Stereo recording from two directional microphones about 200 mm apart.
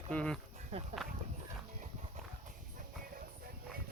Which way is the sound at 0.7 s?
30° right (ahead or behind).